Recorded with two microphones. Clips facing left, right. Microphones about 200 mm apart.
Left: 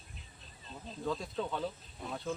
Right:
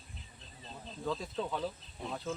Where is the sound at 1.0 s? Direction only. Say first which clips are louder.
Even; centre (ahead or behind).